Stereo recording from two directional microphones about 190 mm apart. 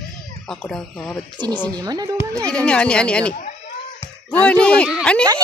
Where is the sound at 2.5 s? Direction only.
5° left (ahead or behind).